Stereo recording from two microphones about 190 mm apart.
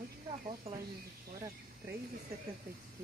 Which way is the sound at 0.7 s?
30° right (ahead or behind).